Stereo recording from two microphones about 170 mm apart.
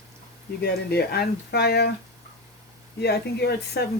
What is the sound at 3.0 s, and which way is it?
Speech, 75° left (ahead or behind).